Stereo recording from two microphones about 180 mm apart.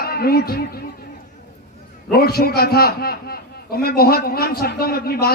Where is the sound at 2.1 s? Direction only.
60° left (ahead or behind).